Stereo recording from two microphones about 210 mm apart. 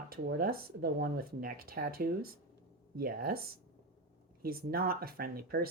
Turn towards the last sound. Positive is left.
turn(degrees=-45)  # may be behind; listen again after turning